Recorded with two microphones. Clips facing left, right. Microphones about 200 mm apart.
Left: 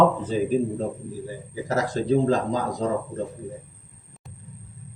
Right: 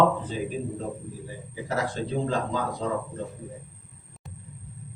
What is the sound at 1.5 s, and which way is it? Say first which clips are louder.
Speech: left 4 dB; 40° left (ahead or behind).